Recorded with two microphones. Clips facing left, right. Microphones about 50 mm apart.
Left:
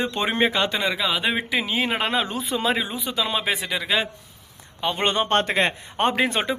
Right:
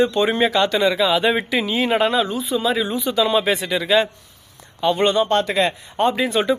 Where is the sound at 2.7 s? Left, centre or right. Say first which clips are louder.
Right 6 dB; centre.